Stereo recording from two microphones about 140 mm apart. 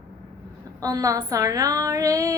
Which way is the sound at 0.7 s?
25° right (ahead or behind).